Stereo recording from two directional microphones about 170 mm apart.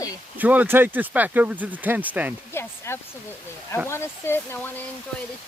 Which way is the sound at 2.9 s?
15° left (ahead or behind).